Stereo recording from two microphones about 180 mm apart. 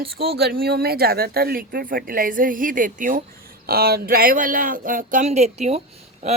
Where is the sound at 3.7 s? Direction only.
60° right (ahead or behind).